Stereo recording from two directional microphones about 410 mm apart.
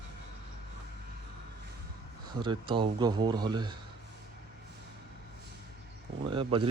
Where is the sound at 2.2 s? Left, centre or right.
Centre.